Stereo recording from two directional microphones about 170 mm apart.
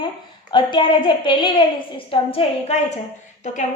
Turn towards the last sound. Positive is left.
turn(degrees=45)  # may be behind; listen again after turning